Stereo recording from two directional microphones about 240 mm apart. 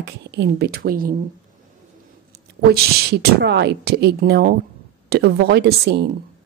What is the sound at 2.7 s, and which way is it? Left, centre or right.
A woman's voice, right.